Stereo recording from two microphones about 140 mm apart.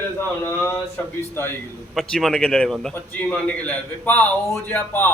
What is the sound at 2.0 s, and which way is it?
A man's voice, centre (ahead or behind).